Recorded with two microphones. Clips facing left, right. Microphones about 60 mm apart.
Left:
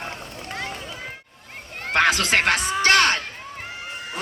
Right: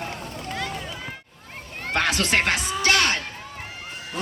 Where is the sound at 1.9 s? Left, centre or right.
Left.